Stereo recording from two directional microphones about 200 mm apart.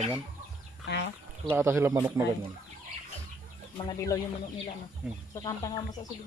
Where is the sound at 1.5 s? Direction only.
15° right (ahead or behind).